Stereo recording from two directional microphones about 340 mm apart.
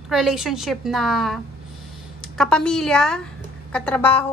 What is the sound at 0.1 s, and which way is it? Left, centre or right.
A woman's voice, centre.